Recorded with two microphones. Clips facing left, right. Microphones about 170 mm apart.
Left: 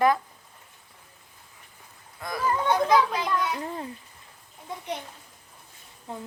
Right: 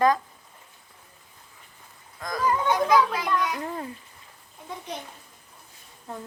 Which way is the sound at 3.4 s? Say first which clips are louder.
Right 1 dB; 30° left (ahead or behind).